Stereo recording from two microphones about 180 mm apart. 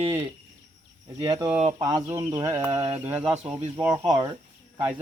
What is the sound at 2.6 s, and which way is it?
Speech, 35° right (ahead or behind).